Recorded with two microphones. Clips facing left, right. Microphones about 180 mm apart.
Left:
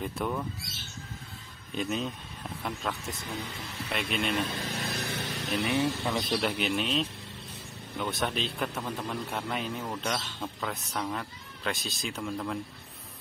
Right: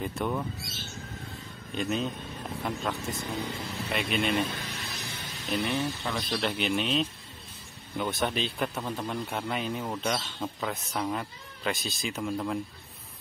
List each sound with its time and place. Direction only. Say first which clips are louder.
0.0 s speech: right 1 dB; centre (ahead or behind)
1.8 s speech: right 2 dB; centre (ahead or behind)
4.7 s a sound: left 6 dB; 60° left (ahead or behind)
5.5 s speech: right 1 dB; 5° left (ahead or behind)
5.8 s speech: left 3 dB; 20° left (ahead or behind)
6.4 s speech: right 1 dB; 5° left (ahead or behind)